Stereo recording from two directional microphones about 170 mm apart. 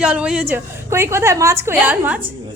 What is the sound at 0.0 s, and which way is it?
A woman's voice, 5° right (ahead or behind).